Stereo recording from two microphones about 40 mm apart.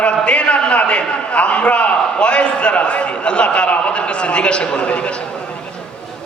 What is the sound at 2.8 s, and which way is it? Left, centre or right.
A man's voice, left.